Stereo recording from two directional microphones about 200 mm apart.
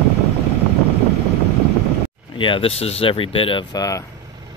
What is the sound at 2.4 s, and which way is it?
Speech, 25° left (ahead or behind).